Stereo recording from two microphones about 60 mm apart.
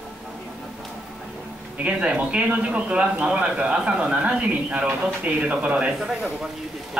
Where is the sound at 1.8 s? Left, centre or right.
Right.